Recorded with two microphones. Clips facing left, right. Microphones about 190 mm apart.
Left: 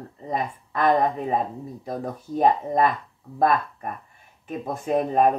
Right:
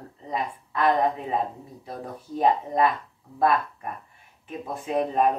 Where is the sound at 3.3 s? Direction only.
45° left (ahead or behind).